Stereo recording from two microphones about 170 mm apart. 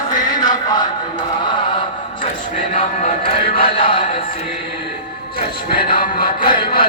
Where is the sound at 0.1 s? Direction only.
25° left (ahead or behind).